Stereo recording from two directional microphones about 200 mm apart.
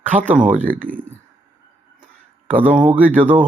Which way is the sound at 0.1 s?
40° right (ahead or behind).